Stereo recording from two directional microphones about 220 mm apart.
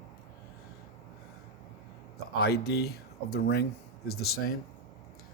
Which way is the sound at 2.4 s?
45° left (ahead or behind).